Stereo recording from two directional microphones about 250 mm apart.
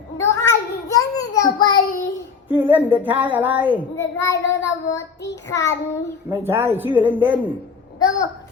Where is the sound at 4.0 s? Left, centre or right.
Centre.